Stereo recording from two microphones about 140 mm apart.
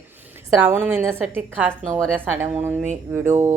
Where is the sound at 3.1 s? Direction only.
20° right (ahead or behind).